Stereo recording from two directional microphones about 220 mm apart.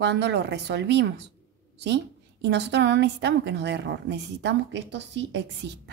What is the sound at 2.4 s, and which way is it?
A woman's voice, 50° right (ahead or behind).